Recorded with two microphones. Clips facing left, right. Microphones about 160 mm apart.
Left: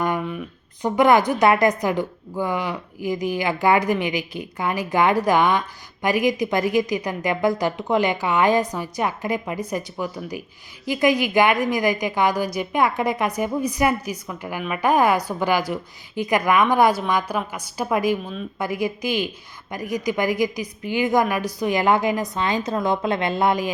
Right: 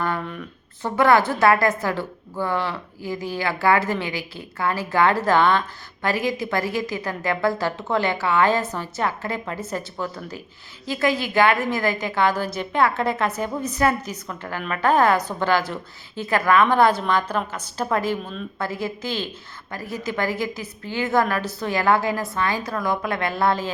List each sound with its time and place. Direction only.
0.0 s a woman's voice: 10° left (ahead or behind)